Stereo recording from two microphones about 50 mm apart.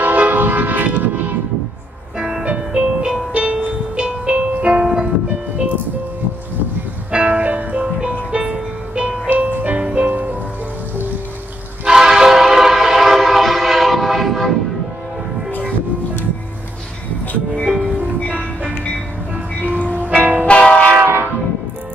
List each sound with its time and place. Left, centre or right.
0.0 s vehicle: right
2.1 s music: centre
7.1 s music: right
11.8 s train: centre
17.6 s music: centre
19.3 s music: right
19.8 s music: left
20.2 s music: right
20.4 s train: left
21.0 s train horn: right